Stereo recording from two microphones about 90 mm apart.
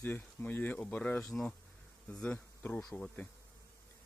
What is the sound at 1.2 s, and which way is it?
Speech, 5° left (ahead or behind).